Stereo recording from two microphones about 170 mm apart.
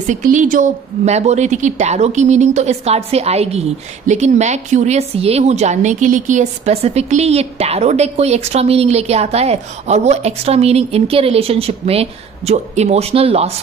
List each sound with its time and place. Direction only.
0.0 s a woman's voice: 45° right (ahead or behind)